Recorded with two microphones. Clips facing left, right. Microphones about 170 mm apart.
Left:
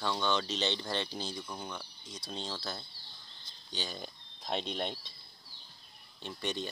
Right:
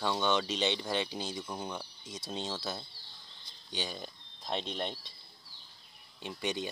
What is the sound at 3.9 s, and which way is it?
Speech, centre (ahead or behind).